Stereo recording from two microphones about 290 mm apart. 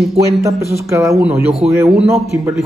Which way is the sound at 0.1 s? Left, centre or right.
Centre.